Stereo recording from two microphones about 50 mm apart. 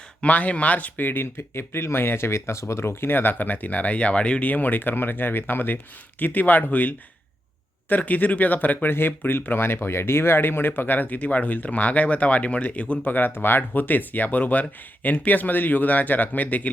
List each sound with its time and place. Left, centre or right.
0.2 s speech: left
4.4 s speech: left
13.1 s speech: left